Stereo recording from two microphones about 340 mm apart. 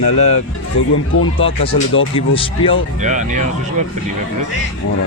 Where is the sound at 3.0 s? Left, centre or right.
Right.